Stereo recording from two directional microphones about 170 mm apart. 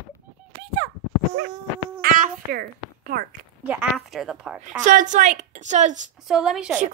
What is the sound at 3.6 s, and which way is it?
Speech, 10° right (ahead or behind).